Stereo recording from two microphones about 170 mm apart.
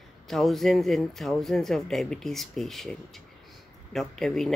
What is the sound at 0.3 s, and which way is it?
Speech, centre (ahead or behind).